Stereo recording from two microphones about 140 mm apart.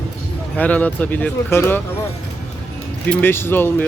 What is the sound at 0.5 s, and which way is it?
Speech, 10° left (ahead or behind).